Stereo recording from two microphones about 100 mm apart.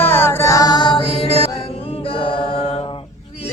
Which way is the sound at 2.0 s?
65° left (ahead or behind).